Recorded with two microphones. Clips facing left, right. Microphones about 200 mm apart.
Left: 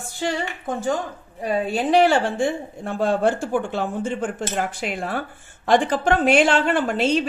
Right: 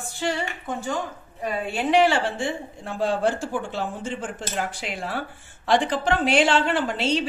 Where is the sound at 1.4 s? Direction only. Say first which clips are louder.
Left 4 dB; 35° left (ahead or behind).